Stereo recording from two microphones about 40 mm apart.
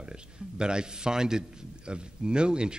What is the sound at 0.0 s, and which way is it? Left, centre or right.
Speech, right.